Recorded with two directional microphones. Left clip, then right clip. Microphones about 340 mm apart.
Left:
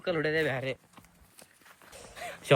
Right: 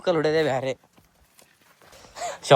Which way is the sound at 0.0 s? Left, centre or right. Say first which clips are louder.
Right 7 dB; centre.